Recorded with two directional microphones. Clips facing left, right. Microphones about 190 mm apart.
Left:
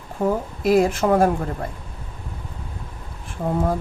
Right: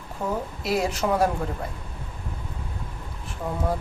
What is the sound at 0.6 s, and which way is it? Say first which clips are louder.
Speech: left 8 dB; 50° left (ahead or behind).